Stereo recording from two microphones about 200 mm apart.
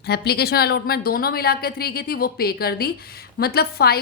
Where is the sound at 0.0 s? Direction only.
55° left (ahead or behind).